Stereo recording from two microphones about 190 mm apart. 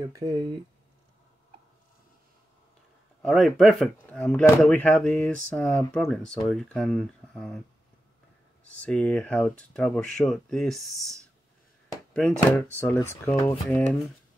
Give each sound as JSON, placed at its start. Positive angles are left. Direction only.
{"t": 0.0, "sound": "speech", "side_deg": -20}
{"t": 3.2, "sound": "speech", "side_deg": 0}
{"t": 8.8, "sound": "speech", "side_deg": 5}